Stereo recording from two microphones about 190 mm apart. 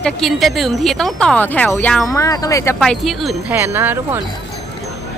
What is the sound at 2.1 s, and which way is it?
Speech, 15° left (ahead or behind).